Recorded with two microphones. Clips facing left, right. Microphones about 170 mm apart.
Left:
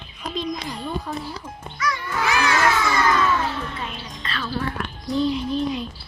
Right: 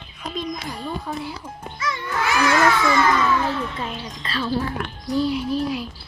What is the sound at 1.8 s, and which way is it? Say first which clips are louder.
Music: left 2 dB; 25° right (ahead or behind).